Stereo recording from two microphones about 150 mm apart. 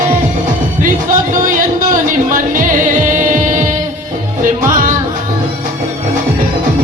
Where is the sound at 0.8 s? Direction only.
65° right (ahead or behind).